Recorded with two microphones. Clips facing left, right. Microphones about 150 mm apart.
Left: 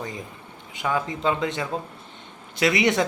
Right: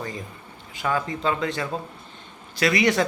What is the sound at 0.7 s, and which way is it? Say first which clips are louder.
Speech: even; 15° left (ahead or behind).